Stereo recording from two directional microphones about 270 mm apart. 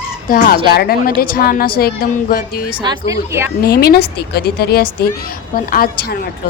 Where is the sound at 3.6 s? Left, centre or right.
Left.